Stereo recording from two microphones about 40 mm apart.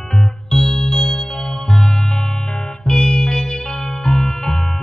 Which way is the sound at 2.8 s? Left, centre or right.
Centre.